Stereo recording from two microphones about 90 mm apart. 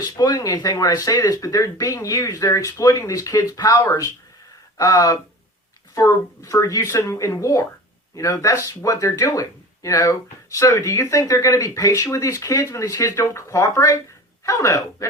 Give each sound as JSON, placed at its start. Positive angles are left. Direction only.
{"t": 0.0, "sound": "speech", "side_deg": 45}